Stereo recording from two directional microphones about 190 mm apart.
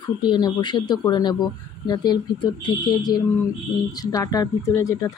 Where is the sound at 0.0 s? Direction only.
25° left (ahead or behind).